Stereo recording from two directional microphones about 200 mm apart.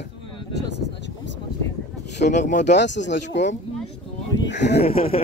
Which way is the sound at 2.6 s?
60° left (ahead or behind).